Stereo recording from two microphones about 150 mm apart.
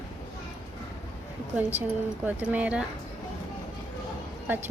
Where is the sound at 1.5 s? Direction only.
10° right (ahead or behind).